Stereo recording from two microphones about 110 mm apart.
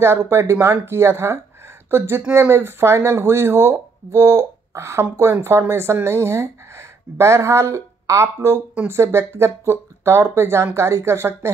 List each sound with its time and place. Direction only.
0.0 s speech: 25° right (ahead or behind)